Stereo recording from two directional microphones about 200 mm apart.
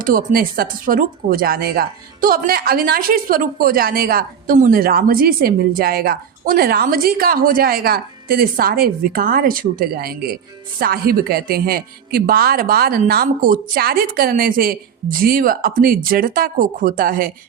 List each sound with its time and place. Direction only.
0.3 s speech: 45° right (ahead or behind)